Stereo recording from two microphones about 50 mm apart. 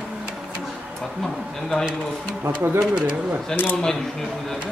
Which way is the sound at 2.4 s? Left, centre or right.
Right.